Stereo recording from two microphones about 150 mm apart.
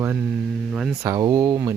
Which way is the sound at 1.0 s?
25° right (ahead or behind).